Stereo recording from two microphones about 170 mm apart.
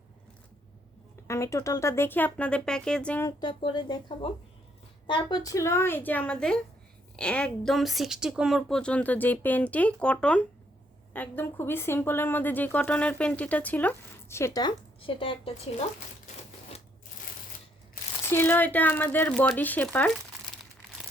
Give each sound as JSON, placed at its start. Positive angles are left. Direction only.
{"t": 1.3, "sound": "speech", "side_deg": 15}
{"t": 3.2, "sound": "speech", "side_deg": 30}
{"t": 18.3, "sound": "speech", "side_deg": 15}